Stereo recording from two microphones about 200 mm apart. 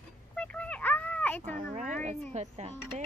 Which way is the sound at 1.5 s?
40° right (ahead or behind).